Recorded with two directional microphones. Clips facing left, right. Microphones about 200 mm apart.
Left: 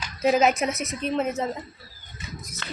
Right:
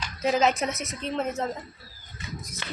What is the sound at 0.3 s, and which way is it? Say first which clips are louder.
Speech: left 3 dB; 15° left (ahead or behind).